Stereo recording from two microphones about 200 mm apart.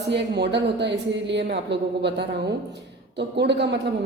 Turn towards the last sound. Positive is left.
turn(degrees=-60)  # may be behind; listen again after turning